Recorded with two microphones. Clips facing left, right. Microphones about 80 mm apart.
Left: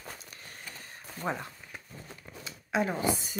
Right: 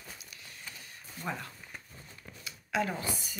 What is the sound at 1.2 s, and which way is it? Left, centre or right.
Speech, left.